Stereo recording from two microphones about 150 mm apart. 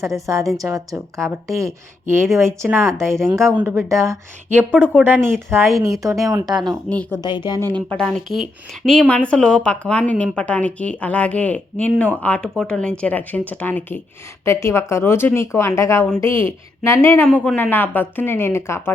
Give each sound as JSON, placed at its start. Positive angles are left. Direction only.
{"t": 0.0, "sound": "speech", "side_deg": -20}
{"t": 6.9, "sound": "speech", "side_deg": 10}
{"t": 7.2, "sound": "speech", "side_deg": 30}
{"t": 7.9, "sound": "speech", "side_deg": 5}